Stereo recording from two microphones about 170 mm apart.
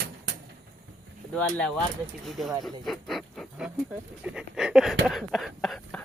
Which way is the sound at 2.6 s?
Centre (ahead or behind).